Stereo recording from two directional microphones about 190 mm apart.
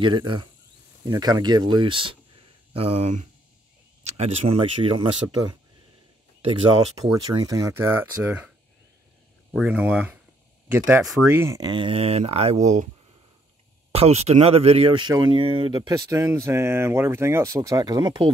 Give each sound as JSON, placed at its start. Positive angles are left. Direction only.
{"t": 0.0, "sound": "speech", "side_deg": -25}
{"t": 7.2, "sound": "speech", "side_deg": -20}
{"t": 9.5, "sound": "speech", "side_deg": -5}
{"t": 13.9, "sound": "speech", "side_deg": -35}